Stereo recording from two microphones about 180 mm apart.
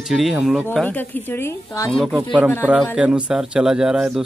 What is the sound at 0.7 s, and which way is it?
Speech, 10° left (ahead or behind).